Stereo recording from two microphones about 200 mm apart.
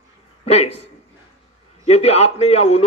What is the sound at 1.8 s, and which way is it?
Speech, 30° left (ahead or behind).